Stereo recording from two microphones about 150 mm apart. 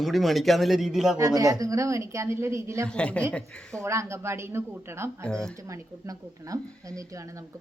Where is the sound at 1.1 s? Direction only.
25° right (ahead or behind).